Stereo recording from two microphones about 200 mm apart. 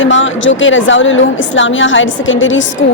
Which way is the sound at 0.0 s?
70° left (ahead or behind).